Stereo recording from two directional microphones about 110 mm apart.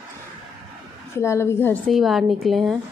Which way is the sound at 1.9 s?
Centre (ahead or behind).